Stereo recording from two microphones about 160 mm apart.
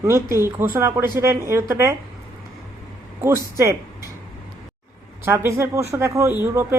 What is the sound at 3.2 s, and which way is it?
Speech, 20° right (ahead or behind).